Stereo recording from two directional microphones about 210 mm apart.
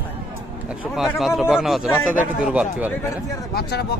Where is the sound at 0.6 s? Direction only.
5° right (ahead or behind).